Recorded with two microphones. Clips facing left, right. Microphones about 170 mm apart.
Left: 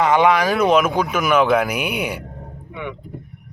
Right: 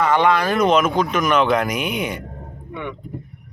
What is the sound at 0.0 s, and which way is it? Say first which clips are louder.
Speech: left 2 dB; 15° left (ahead or behind).